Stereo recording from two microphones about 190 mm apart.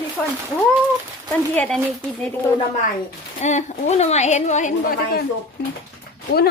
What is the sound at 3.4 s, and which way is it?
A woman's voice, 40° left (ahead or behind).